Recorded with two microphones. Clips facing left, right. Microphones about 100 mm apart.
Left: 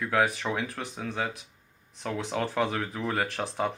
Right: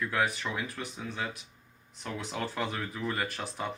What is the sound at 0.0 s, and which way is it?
Speech, 90° left.